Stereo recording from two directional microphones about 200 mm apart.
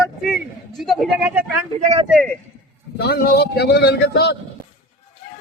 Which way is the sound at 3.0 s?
55° left (ahead or behind).